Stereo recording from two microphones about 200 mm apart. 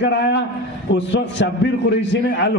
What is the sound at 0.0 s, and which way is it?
A man's voice, 60° left (ahead or behind).